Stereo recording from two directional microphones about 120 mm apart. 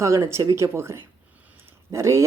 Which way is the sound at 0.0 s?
25° right (ahead or behind).